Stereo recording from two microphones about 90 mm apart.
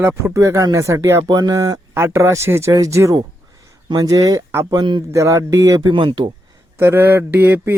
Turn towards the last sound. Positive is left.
turn(degrees=-25)  # may be behind; listen again after turning